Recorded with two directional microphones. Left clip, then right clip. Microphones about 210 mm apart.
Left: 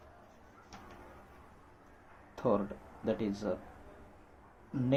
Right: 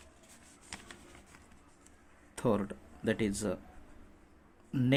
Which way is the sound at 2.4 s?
40° right (ahead or behind).